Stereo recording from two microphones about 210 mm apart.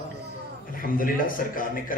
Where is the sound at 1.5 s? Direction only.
40° left (ahead or behind).